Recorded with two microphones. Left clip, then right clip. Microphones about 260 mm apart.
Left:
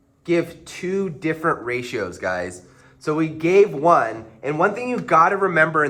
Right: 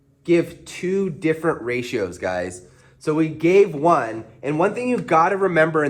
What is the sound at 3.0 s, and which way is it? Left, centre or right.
A man's voice, right.